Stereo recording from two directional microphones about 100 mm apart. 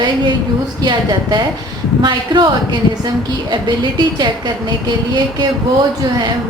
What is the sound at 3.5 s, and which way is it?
Speech, 50° right (ahead or behind).